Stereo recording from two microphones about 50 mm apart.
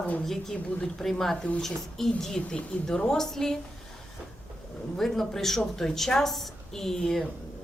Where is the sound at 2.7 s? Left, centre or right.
Left.